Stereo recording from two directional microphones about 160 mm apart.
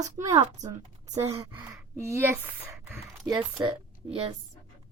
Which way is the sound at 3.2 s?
30° right (ahead or behind).